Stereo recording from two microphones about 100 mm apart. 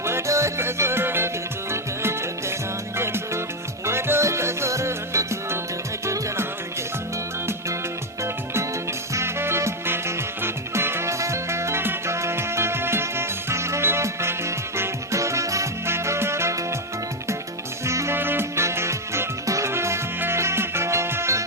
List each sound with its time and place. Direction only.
0.0 s music: 25° right (ahead or behind)
9.1 s music: 25° right (ahead or behind)
17.8 s music: 30° right (ahead or behind)